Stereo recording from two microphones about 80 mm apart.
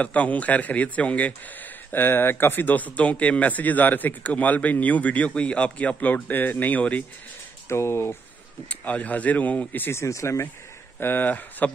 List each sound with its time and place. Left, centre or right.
0.0 s speech: centre
7.6 s speech: left
8.6 s speech: centre; by 10.5 s left
11.0 s speech: left